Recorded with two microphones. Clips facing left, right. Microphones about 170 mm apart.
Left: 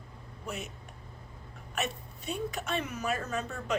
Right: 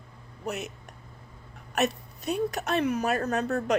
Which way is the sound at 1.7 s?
70° right (ahead or behind).